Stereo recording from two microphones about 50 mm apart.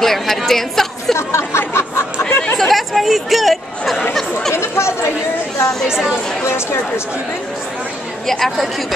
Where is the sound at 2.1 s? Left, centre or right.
Left.